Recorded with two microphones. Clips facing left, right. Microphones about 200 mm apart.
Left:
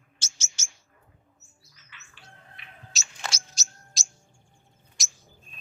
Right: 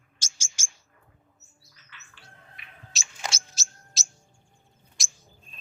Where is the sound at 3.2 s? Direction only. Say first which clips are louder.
Right 1 dB; 25° right (ahead or behind).